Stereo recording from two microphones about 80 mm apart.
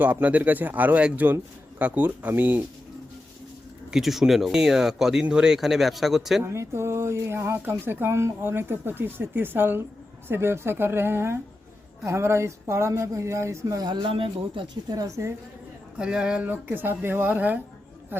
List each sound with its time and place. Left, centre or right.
0.0 s speech: centre
3.9 s speech: centre
6.4 s speech: right
13.8 s speech: right
14.5 s speech: right
16.0 s speech: centre
16.5 s speech: right